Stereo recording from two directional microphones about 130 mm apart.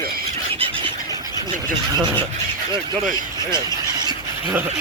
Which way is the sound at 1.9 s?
35° right (ahead or behind).